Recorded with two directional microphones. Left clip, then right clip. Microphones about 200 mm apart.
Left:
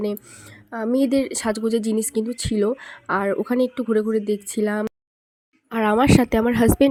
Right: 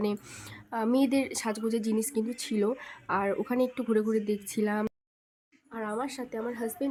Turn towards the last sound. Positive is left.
turn(degrees=50)  # may be behind; listen again after turning